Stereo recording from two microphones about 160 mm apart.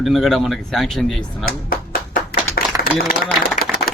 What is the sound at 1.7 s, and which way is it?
Clapping, 70° left (ahead or behind).